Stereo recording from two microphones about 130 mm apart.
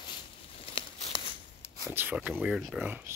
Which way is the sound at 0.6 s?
45° left (ahead or behind).